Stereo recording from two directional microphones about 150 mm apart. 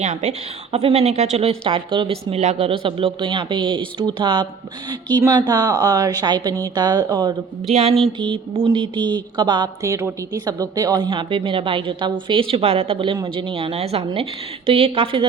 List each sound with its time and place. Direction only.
0.0 s a woman's voice: 50° right (ahead or behind); by 7.3 s 25° right (ahead or behind)
7.7 s a sound: 45° right (ahead or behind)
8.2 s a woman's voice: 35° right (ahead or behind)